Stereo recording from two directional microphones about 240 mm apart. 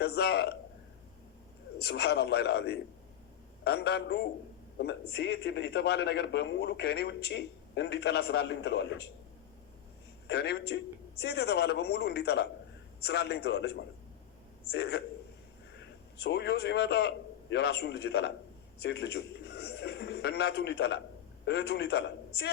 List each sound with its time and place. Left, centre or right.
0.0 s a man's voice: left
1.8 s a man's voice: left
10.2 s a man's voice: left
16.1 s a man's voice: left